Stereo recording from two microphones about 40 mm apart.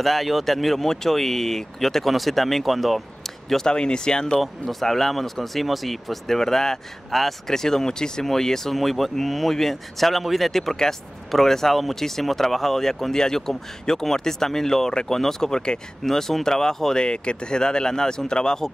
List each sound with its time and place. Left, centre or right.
0.0 s speech: centre
3.4 s speech: centre
4.4 s speech: centre